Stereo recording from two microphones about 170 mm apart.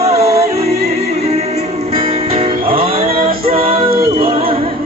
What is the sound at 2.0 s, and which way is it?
Music, 35° right (ahead or behind).